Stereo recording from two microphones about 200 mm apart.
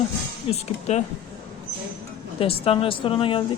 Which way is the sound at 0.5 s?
35° left (ahead or behind).